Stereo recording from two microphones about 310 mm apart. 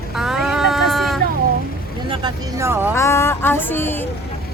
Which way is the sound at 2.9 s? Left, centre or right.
Centre.